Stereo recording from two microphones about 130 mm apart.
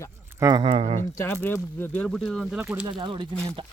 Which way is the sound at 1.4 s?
15° left (ahead or behind).